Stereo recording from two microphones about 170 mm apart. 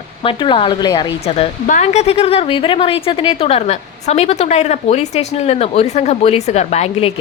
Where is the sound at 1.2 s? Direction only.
35° left (ahead or behind).